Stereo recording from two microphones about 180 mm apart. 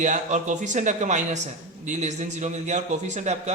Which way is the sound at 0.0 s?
40° right (ahead or behind).